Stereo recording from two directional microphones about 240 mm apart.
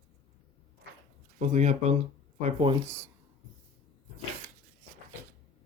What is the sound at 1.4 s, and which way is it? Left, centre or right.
Speech, right.